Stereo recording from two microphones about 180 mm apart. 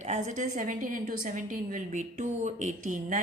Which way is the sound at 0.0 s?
40° right (ahead or behind).